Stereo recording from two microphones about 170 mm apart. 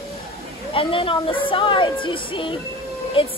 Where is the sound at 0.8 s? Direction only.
30° left (ahead or behind).